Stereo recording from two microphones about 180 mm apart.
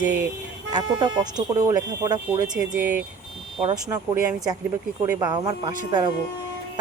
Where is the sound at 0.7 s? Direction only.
25° right (ahead or behind).